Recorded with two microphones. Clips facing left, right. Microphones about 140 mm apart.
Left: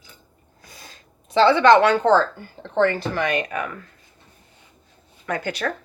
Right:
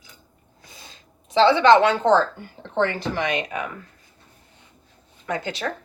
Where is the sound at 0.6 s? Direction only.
25° right (ahead or behind).